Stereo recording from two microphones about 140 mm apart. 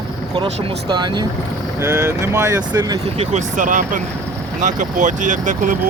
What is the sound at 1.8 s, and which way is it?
Speech, 15° right (ahead or behind).